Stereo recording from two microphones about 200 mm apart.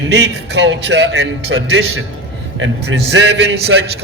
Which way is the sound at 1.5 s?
75° right (ahead or behind).